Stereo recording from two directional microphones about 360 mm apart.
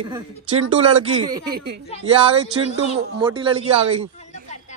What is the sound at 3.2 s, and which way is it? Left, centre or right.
Speech, centre.